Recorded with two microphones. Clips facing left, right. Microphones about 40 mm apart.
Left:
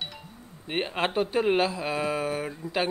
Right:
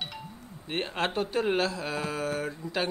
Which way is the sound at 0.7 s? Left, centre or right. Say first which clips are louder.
Left 2 dB; centre.